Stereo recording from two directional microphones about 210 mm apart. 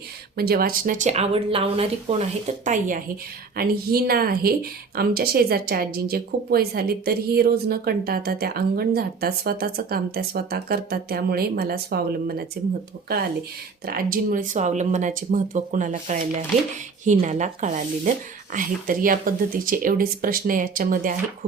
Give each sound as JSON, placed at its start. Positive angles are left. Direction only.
{"t": 0.3, "sound": "speech", "side_deg": -45}
{"t": 13.8, "sound": "speech", "side_deg": -45}